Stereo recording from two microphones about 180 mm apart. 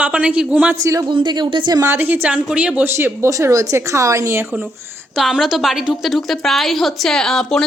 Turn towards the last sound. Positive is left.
turn(degrees=5)  # may be behind; listen again after turning